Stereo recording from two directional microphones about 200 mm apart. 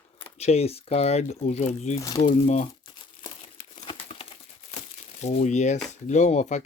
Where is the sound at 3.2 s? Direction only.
25° left (ahead or behind).